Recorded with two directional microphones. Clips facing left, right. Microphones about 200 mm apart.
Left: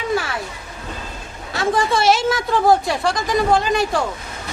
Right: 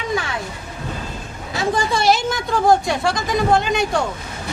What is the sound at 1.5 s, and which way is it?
Speech, centre (ahead or behind).